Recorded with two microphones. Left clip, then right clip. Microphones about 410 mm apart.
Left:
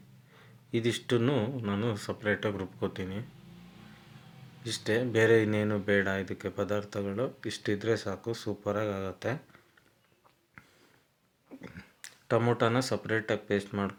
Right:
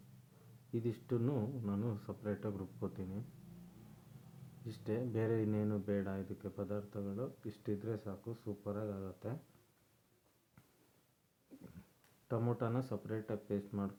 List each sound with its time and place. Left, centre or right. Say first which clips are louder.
0.7 s speech: left 11 dB; right
4.6 s speech: left 12 dB; right
12.3 s speech: left 13 dB; right